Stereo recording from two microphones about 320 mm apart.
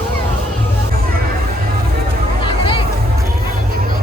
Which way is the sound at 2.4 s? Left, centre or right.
Centre.